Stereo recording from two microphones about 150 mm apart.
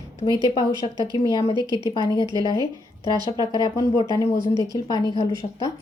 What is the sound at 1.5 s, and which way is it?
A woman's voice, 30° right (ahead or behind).